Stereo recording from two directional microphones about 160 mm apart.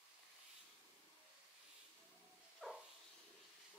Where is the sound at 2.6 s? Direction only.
Centre (ahead or behind).